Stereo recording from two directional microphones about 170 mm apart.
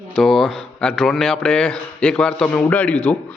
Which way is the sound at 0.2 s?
Centre (ahead or behind).